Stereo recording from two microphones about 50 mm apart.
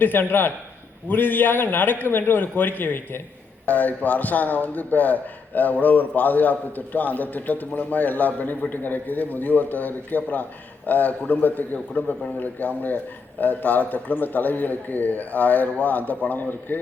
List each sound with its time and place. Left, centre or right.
0.0 s a man's voice: left